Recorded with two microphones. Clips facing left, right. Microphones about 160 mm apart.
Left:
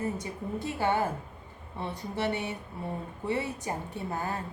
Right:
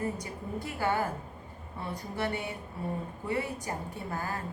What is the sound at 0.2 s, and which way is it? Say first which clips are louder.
A woman's voice: left 3 dB; 20° left (ahead or behind).